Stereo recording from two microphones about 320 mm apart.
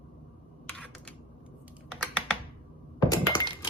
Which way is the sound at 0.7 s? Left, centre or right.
Centre.